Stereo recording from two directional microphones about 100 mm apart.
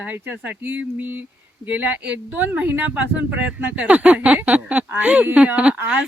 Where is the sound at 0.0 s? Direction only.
15° right (ahead or behind).